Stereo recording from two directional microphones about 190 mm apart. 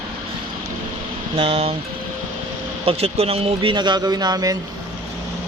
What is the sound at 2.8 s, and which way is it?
Speech, 30° right (ahead or behind).